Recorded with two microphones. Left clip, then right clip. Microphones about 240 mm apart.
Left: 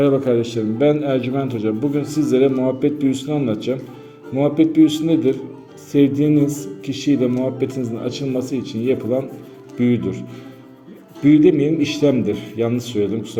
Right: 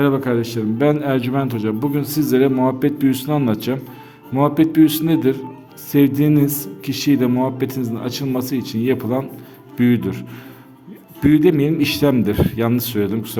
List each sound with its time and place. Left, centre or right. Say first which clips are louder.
0.0 s a man's voice: left 2 dB; right